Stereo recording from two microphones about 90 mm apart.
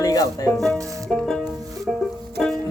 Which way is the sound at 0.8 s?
35° right (ahead or behind).